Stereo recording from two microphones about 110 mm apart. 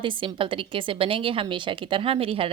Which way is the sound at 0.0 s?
50° right (ahead or behind).